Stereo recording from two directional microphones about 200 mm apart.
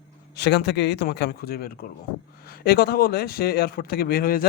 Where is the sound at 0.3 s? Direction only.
60° left (ahead or behind).